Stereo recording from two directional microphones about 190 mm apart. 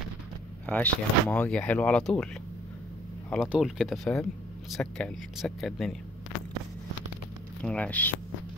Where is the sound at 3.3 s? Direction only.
Centre (ahead or behind).